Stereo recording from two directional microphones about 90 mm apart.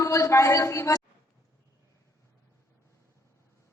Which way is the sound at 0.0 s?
35° left (ahead or behind).